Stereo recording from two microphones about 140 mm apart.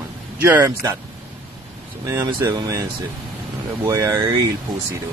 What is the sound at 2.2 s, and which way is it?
Speech, 30° right (ahead or behind).